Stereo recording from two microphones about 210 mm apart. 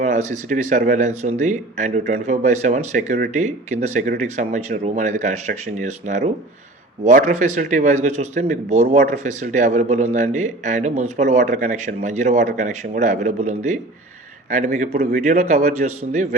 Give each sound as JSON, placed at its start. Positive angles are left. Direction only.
{"t": 0.0, "sound": "speech", "side_deg": -35}